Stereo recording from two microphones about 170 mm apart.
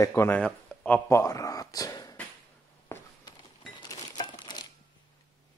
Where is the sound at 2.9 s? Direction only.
15° left (ahead or behind).